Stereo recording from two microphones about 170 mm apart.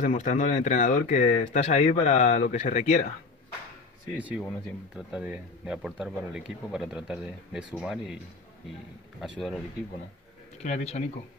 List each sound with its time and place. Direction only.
0.0 s speech: 45° left (ahead or behind)
4.2 s speech: 10° right (ahead or behind)
10.6 s speech: 40° left (ahead or behind)